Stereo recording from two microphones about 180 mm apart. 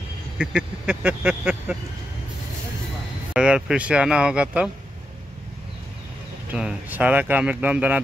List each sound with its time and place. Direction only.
0.4 s speech: 5° right (ahead or behind)
3.3 s speech: 5° right (ahead or behind)
6.5 s speech: 5° right (ahead or behind)